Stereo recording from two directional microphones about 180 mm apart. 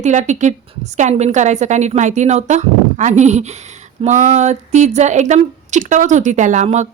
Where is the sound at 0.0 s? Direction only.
40° right (ahead or behind).